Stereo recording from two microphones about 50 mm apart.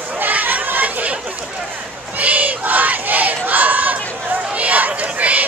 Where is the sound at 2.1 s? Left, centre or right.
Right.